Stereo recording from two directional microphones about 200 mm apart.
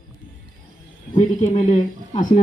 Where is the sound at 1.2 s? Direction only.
35° left (ahead or behind).